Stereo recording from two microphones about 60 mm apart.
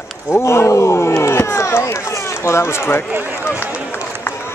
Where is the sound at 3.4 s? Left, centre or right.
Left.